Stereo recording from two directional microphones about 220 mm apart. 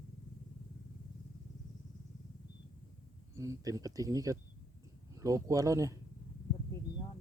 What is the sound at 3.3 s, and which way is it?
Speech, 15° right (ahead or behind).